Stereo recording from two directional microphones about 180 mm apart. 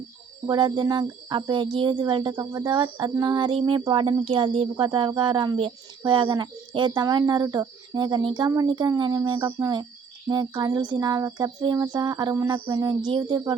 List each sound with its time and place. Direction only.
0.4 s speech: 25° right (ahead or behind)